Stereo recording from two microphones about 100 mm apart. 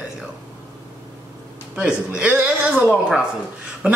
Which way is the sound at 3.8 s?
10° right (ahead or behind).